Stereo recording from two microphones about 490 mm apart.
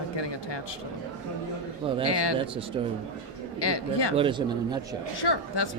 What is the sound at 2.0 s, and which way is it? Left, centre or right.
Speech, left.